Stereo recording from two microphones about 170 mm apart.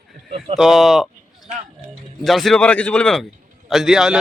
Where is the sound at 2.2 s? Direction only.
Centre (ahead or behind).